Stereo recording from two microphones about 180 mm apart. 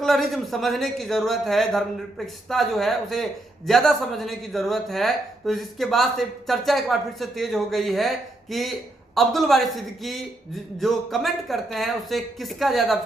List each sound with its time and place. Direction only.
0.0 s speech: centre (ahead or behind)